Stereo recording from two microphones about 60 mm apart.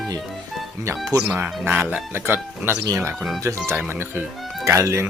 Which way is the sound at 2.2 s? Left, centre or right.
Right.